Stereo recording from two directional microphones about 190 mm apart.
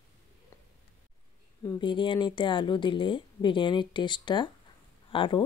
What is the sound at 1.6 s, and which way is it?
Speech, 25° left (ahead or behind).